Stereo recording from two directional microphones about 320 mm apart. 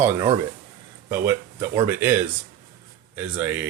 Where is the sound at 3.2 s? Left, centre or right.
Centre.